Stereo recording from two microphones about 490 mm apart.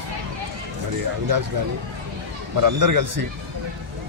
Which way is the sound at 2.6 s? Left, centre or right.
Right.